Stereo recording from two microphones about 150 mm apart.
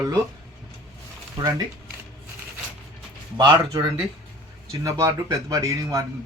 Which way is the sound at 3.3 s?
30° right (ahead or behind).